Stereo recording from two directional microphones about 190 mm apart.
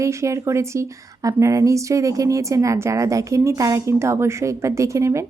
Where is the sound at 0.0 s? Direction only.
15° right (ahead or behind).